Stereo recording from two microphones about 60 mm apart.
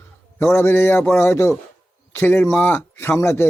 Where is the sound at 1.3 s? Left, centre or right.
Left.